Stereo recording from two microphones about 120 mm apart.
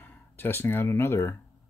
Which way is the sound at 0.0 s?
15° left (ahead or behind).